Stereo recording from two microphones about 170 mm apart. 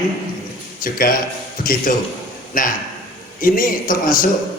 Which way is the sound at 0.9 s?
55° left (ahead or behind).